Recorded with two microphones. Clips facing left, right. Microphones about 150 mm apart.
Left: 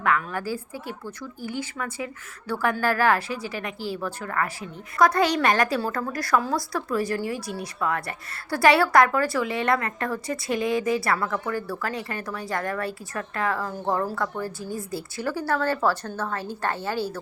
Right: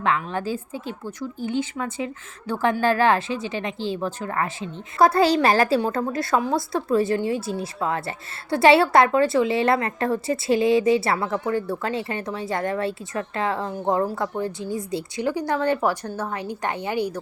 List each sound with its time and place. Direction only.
0.3 s a woman's voice: 20° right (ahead or behind)